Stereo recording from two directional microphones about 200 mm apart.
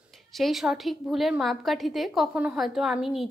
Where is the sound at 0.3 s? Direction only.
Centre (ahead or behind).